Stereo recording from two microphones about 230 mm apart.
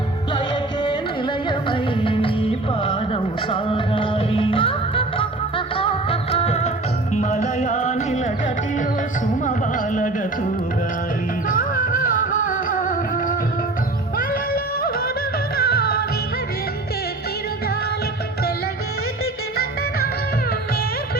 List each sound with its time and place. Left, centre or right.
0.3 s music: centre
9.5 s carnatic music: left
11.4 s music: left
14.8 s music: left
19.2 s music: left